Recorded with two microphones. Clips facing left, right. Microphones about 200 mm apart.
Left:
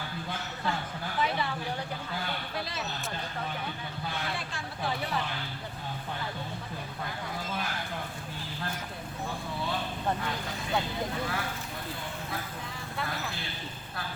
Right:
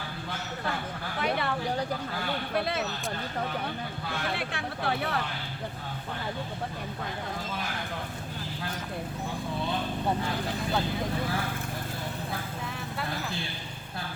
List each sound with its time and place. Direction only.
1.2 s speech: 60° right (ahead or behind)
2.6 s speech: 60° right (ahead or behind)
4.4 s speech: 60° right (ahead or behind)